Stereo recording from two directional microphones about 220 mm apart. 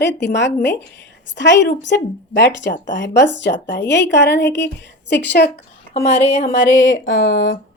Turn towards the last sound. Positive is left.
turn(degrees=45)  # may be behind; listen again after turning